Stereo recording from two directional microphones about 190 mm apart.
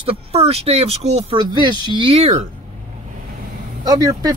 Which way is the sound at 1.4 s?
25° right (ahead or behind).